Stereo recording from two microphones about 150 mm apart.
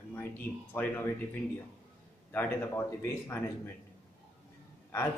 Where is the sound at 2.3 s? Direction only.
15° left (ahead or behind).